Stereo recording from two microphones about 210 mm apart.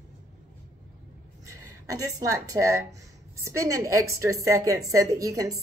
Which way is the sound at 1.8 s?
15° right (ahead or behind).